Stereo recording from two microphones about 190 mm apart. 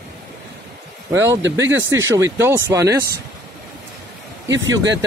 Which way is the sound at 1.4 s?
75° right (ahead or behind).